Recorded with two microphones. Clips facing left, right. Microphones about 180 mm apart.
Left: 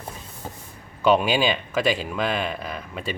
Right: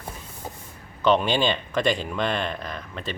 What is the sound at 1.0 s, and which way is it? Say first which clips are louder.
Speech: left 1 dB; 10° left (ahead or behind).